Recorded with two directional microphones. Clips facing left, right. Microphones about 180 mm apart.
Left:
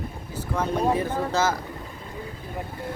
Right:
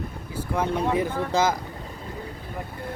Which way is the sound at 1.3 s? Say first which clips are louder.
Right 2 dB; 15° right (ahead or behind).